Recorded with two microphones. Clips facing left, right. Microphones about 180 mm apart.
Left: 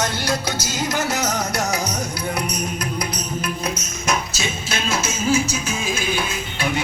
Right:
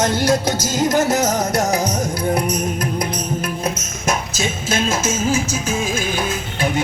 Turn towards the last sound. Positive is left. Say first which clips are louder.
# right 4 dB
turn(degrees=-45)  # may be behind; listen again after turning